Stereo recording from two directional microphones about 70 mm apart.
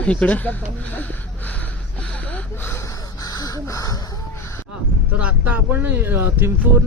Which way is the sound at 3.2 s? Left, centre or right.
Left.